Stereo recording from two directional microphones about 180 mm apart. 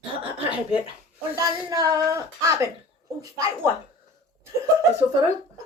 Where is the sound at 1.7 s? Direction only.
20° right (ahead or behind).